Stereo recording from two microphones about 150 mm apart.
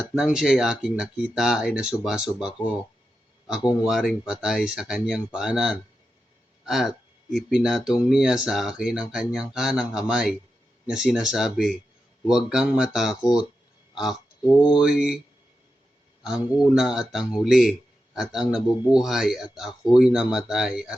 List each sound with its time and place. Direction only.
0.1 s speech: 5° right (ahead or behind)
3.8 s speech: 5° right (ahead or behind)
13.9 s a sound: centre (ahead or behind)
14.8 s speech: 5° right (ahead or behind)
16.2 s speech: 5° right (ahead or behind)